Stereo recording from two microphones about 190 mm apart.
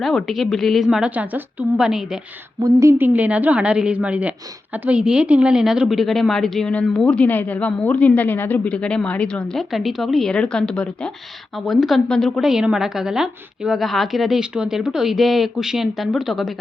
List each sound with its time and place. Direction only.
0.0 s a woman's voice: centre (ahead or behind)
2.6 s a woman's voice: 15° right (ahead or behind)